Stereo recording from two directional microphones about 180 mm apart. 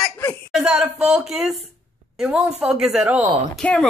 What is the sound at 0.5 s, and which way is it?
Speech, 5° right (ahead or behind).